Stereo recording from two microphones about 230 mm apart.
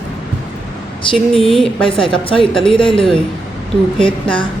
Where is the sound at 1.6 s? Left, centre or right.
Left.